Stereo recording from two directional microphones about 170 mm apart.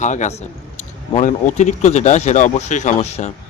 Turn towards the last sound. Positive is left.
turn(degrees=40)  # may be behind; listen again after turning